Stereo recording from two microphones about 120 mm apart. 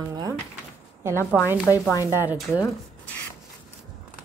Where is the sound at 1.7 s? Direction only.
25° left (ahead or behind).